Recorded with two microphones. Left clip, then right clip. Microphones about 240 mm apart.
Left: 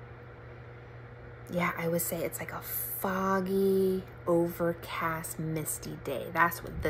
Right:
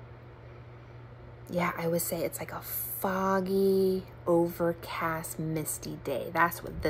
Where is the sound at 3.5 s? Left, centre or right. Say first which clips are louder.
Right 1 dB; centre.